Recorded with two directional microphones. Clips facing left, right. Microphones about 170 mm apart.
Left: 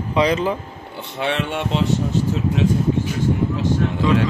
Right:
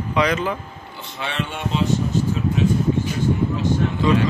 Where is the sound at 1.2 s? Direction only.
65° left (ahead or behind).